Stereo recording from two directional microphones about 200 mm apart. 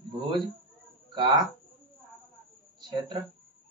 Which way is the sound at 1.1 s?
20° right (ahead or behind).